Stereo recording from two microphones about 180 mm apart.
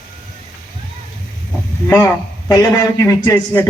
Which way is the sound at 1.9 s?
20° left (ahead or behind).